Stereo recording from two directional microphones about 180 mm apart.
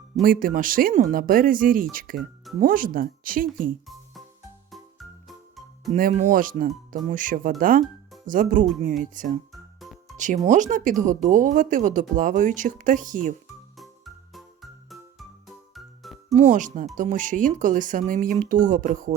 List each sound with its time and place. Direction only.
0.2 s speech: 50° right (ahead or behind)
2.1 s music: centre (ahead or behind)
2.6 s speech: 50° right (ahead or behind)
4.7 s music: centre (ahead or behind)
6.0 s speech: 45° right (ahead or behind)
9.5 s music: centre (ahead or behind)
10.2 s speech: 45° right (ahead or behind)
13.7 s music: centre (ahead or behind)
16.3 s speech: 45° right (ahead or behind)